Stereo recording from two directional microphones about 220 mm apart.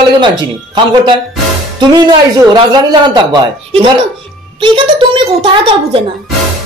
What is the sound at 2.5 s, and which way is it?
Speech, 20° right (ahead or behind).